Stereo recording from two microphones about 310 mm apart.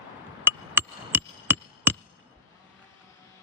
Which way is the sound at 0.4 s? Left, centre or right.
Centre.